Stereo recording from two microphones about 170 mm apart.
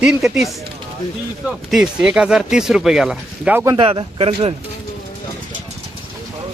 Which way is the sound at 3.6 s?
20° right (ahead or behind).